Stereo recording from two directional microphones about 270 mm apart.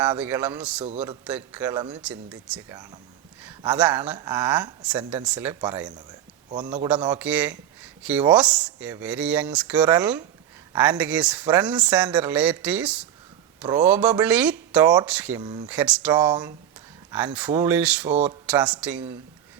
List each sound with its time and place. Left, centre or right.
0.2 s speech: centre
2.5 s speech: centre
7.0 s speech: centre
7.3 s speech: centre
15.6 s speech: centre